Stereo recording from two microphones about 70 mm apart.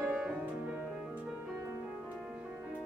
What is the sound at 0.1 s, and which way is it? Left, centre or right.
Music, centre.